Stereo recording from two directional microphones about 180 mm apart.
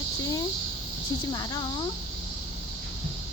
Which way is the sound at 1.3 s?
20° left (ahead or behind).